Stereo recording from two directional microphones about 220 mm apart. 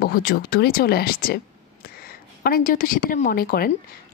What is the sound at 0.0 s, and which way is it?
A woman's voice, 45° left (ahead or behind).